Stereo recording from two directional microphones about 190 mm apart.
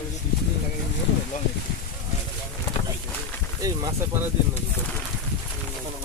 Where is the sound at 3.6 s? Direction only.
15° right (ahead or behind).